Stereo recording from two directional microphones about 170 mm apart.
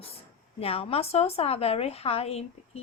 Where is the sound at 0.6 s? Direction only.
35° left (ahead or behind).